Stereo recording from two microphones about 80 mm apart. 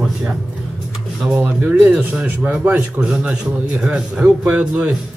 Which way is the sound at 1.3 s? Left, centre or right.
Centre.